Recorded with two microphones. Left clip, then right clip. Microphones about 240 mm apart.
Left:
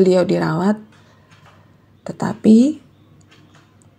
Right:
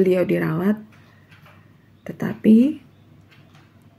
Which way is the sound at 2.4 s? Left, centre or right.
Left.